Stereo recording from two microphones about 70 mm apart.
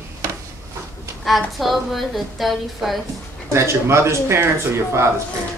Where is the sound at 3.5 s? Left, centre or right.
Right.